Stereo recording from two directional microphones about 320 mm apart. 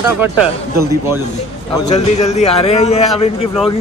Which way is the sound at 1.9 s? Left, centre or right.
Left.